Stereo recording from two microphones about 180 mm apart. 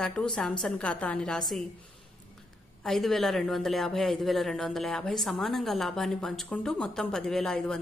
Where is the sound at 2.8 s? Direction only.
Centre (ahead or behind).